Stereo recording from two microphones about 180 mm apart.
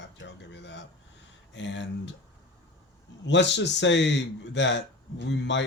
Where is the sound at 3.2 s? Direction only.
75° left (ahead or behind).